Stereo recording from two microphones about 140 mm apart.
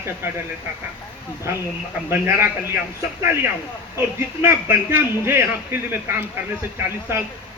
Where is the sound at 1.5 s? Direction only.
20° right (ahead or behind).